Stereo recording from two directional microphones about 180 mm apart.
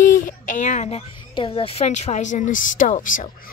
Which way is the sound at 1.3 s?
30° left (ahead or behind).